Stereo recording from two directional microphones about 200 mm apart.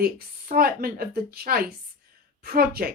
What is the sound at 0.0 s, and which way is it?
A woman's voice, 45° right (ahead or behind).